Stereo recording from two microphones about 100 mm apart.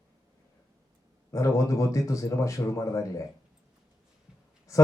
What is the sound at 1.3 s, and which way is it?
Speech, 30° left (ahead or behind).